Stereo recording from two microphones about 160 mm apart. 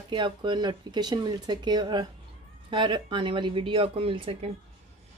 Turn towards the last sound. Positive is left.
turn(degrees=-35)  # may be behind; listen again after turning